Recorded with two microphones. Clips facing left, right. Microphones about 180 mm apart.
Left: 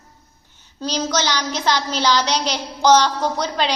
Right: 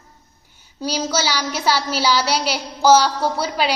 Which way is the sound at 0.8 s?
10° right (ahead or behind).